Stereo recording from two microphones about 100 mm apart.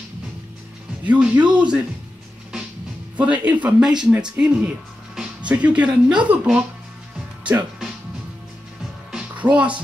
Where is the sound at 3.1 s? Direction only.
15° right (ahead or behind).